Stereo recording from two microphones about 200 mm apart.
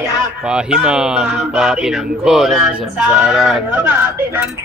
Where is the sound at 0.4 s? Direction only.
5° right (ahead or behind).